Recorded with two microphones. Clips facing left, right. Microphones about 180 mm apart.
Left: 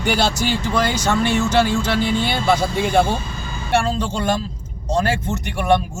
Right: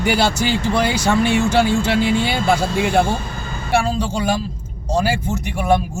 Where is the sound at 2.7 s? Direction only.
75° right (ahead or behind).